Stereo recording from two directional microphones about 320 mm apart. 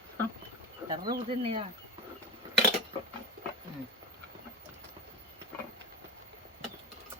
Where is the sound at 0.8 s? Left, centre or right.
Centre.